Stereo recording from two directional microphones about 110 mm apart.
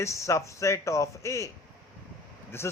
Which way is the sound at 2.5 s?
20° left (ahead or behind).